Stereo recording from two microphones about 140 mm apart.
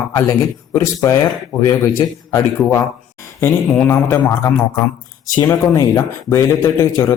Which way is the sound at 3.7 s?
15° left (ahead or behind).